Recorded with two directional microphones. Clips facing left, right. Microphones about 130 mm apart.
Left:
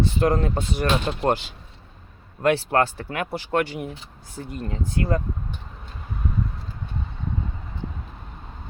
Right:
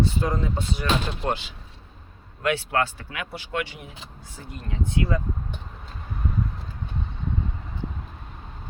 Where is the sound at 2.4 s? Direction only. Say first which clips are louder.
Left 4 dB; 40° left (ahead or behind).